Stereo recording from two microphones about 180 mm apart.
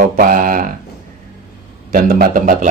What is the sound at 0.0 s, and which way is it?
Speech, 50° right (ahead or behind).